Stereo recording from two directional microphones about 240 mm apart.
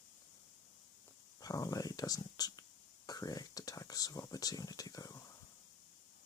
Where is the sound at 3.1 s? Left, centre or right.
Centre.